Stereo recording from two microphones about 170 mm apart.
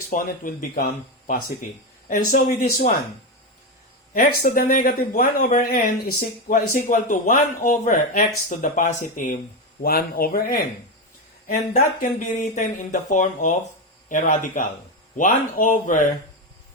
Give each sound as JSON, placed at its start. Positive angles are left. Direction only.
{"t": 0.1, "sound": "speech", "side_deg": 55}
{"t": 2.0, "sound": "speech", "side_deg": 55}
{"t": 4.1, "sound": "speech", "side_deg": 55}
{"t": 9.8, "sound": "speech", "side_deg": 60}